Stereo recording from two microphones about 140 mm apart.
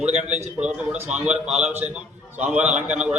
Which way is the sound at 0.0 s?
55° right (ahead or behind).